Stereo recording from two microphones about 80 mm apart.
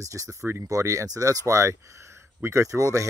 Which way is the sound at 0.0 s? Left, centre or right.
Right.